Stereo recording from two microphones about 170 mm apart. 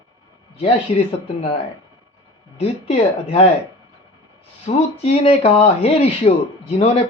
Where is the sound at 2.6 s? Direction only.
35° left (ahead or behind).